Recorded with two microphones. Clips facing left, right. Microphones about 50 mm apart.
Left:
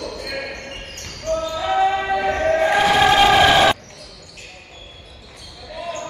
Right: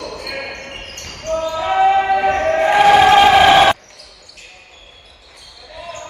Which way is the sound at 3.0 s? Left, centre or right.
Centre.